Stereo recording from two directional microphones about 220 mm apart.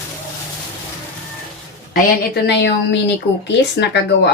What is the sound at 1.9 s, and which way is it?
Speech, 50° left (ahead or behind).